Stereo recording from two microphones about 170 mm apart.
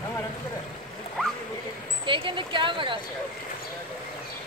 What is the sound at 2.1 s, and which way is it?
Speech, 30° right (ahead or behind).